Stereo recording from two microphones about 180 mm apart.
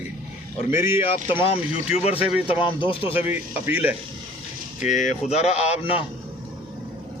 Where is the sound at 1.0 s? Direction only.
30° left (ahead or behind).